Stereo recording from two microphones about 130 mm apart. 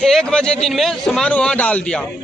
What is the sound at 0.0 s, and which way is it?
A man's voice, 5° left (ahead or behind).